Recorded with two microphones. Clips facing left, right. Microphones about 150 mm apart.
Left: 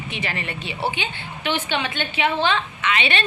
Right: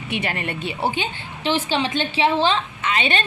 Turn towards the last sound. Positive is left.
turn(degrees=-40)  # may be behind; listen again after turning